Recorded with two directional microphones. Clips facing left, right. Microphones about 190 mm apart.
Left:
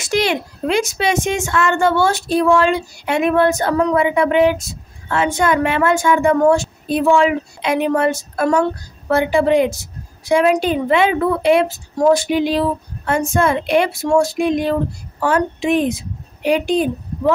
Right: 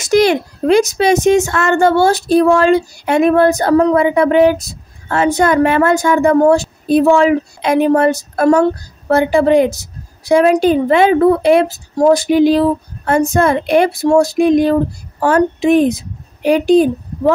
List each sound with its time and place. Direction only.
0.0 s a child's voice: 40° right (ahead or behind)